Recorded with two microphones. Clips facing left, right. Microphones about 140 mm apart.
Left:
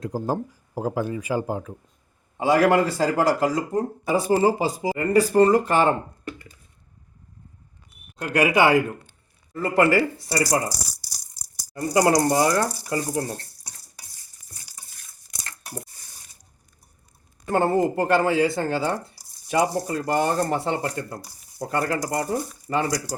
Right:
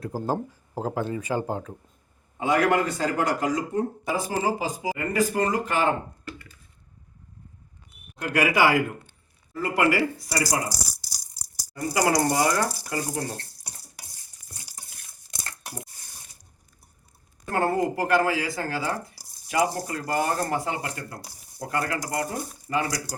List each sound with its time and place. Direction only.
0.0 s speech: 15° left (ahead or behind)
2.4 s speech: 30° left (ahead or behind)
8.2 s speech: 25° left (ahead or behind)
11.7 s speech: 25° left (ahead or behind)
17.5 s speech: 25° left (ahead or behind)